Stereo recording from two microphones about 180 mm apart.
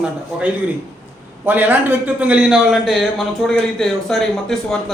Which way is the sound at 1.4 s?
10° right (ahead or behind).